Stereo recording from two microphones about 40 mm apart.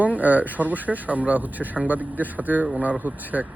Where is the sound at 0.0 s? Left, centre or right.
Right.